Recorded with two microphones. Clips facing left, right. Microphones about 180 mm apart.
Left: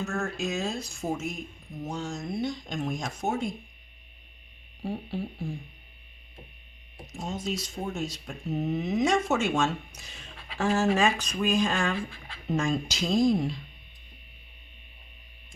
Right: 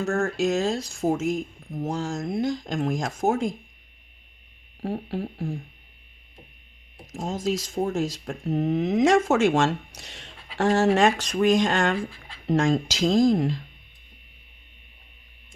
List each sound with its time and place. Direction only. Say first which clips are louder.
0.0 s speech: right 7 dB; 90° right
5.1 s speech: right 4 dB; 90° right
7.1 s speech: right 6 dB; 90° right
12.5 s speech: right 6 dB; 90° right